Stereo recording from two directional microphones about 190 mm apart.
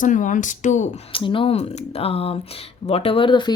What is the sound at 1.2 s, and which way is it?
Speech, 30° left (ahead or behind).